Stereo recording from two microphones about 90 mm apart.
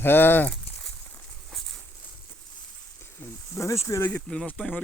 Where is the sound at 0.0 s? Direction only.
25° left (ahead or behind).